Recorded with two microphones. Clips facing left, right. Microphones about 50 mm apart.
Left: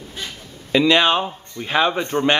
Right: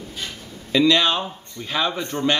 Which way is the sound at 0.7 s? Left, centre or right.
Left.